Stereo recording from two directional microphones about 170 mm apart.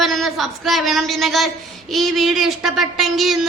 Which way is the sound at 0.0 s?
Centre (ahead or behind).